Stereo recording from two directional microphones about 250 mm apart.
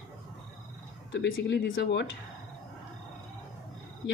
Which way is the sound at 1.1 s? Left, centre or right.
Left.